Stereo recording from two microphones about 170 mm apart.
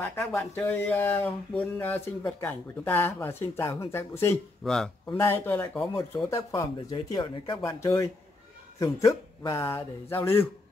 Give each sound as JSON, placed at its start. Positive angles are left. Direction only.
{"t": 0.0, "sound": "speech", "side_deg": 10}
{"t": 4.6, "sound": "speech", "side_deg": 5}